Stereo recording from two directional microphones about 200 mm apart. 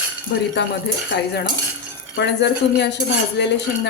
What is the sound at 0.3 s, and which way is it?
Speech, 60° left (ahead or behind).